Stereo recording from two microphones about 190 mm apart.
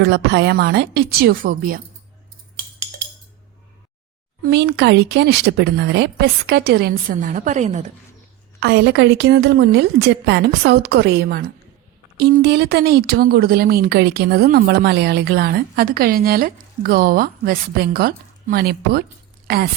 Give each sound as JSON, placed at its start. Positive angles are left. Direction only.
{"t": 0.0, "sound": "speech", "side_deg": -65}
{"t": 2.6, "sound": "music", "side_deg": -60}
{"t": 4.4, "sound": "speech", "side_deg": -65}
{"t": 8.6, "sound": "speech", "side_deg": -60}